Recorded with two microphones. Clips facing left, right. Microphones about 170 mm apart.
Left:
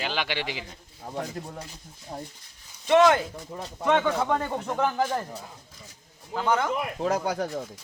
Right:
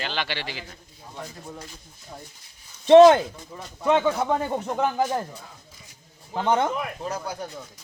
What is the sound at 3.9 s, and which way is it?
Speech, 10° right (ahead or behind).